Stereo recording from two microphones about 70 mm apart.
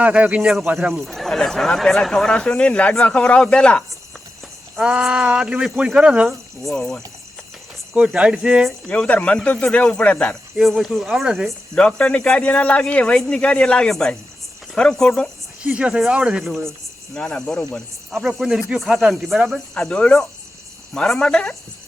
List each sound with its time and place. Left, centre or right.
0.0 s speech: centre
1.0 s speech: centre
4.8 s speech: centre
6.7 s speech: centre
7.9 s speech: centre
8.9 s speech: left
10.6 s speech: centre
11.7 s speech: centre
15.6 s speech: centre
16.4 s speech: centre
17.2 s speech: centre
18.1 s speech: centre
19.7 s speech: centre